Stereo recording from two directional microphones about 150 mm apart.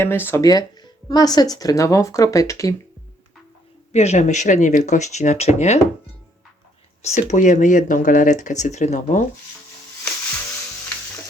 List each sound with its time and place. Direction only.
0.0 s speech: 15° left (ahead or behind)
0.4 s speech: 25° left (ahead or behind)
3.9 s speech: 45° left (ahead or behind)
7.0 s speech: 50° left (ahead or behind)